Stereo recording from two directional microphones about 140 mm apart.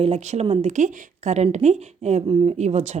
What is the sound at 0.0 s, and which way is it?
Speech, 50° right (ahead or behind).